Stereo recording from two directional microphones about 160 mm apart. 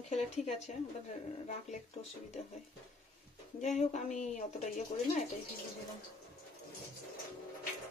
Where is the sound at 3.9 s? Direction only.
45° left (ahead or behind).